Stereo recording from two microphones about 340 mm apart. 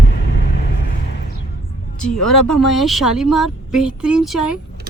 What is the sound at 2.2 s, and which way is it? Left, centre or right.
Speech, left.